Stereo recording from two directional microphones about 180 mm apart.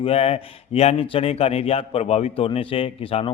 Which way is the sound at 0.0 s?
35° left (ahead or behind).